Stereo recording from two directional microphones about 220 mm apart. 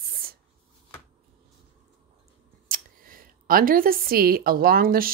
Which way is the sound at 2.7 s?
40° right (ahead or behind).